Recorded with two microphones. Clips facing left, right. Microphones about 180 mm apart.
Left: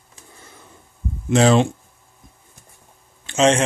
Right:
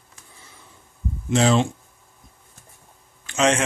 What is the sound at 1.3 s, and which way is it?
Speech, 60° left (ahead or behind).